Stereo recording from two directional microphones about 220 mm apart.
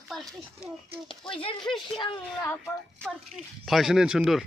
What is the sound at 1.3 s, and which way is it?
Speech, 25° left (ahead or behind).